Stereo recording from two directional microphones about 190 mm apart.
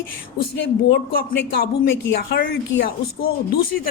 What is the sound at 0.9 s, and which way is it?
Speech, 55° left (ahead or behind).